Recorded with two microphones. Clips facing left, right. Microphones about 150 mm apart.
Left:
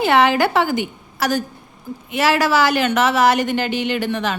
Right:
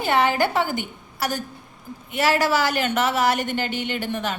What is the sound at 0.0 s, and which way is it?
A woman's voice, 90° left.